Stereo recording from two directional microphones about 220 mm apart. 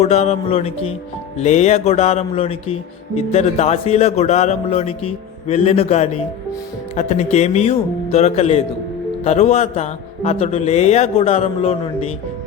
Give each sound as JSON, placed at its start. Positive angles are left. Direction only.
{"t": 0.0, "sound": "a man's voice", "side_deg": 30}